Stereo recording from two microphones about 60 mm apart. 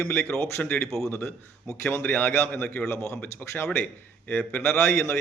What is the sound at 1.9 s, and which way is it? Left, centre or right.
Speech, left.